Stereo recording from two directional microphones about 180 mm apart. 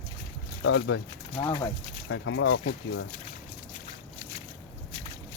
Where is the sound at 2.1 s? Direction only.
90° left.